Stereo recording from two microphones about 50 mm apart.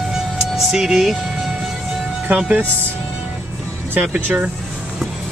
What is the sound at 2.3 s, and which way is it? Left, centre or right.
Speech, right.